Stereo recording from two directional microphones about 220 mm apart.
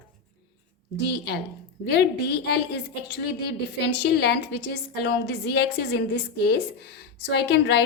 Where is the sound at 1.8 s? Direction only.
50° left (ahead or behind).